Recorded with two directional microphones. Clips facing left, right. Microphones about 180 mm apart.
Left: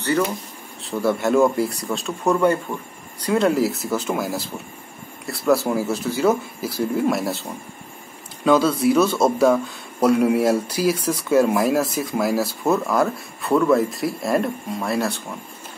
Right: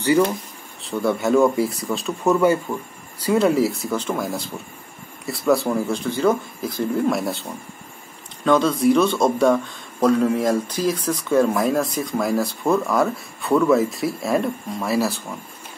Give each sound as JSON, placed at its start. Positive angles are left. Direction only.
{"t": 0.8, "sound": "speech", "side_deg": 0}
{"t": 8.5, "sound": "speech", "side_deg": 5}